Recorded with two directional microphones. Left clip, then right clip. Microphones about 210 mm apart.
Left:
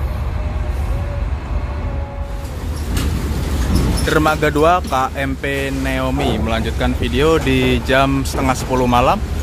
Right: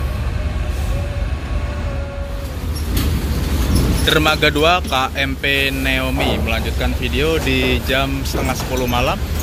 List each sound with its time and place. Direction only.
4.0 s speech: 15° left (ahead or behind)